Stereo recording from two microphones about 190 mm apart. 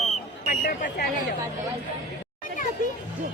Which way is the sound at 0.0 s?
45° left (ahead or behind).